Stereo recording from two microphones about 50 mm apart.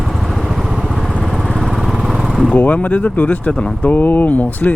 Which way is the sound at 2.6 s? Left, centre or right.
Left.